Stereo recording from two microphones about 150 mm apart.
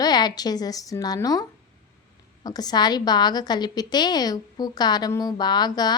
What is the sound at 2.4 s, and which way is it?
A woman's voice, 25° left (ahead or behind).